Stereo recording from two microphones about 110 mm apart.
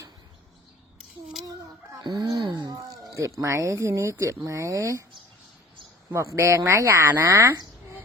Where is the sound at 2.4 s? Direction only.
45° right (ahead or behind).